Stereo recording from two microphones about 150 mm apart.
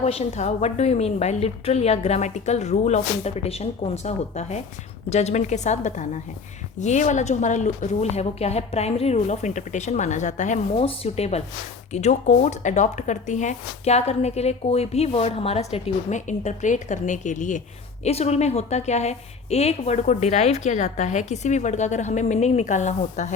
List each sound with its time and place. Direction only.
0.0 s speech: 45° left (ahead or behind)
10.8 s speech: 45° left (ahead or behind)
18.0 s speech: 45° left (ahead or behind)